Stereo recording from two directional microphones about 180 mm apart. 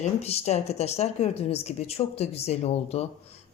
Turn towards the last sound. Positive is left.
turn(degrees=35)  # may be behind; listen again after turning